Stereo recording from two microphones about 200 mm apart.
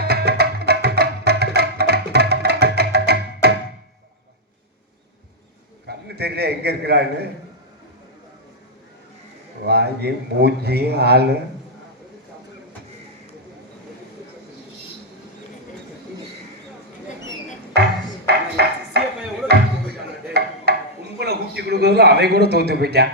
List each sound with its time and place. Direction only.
0.0 s music: 55° right (ahead or behind)
5.8 s a man's voice: 55° right (ahead or behind)
9.6 s speech: 55° right (ahead or behind)
17.7 s music: 55° right (ahead or behind)
18.3 s a sound: 55° right (ahead or behind)
20.7 s a sound: 55° right (ahead or behind)
21.2 s a man's voice: 55° right (ahead or behind)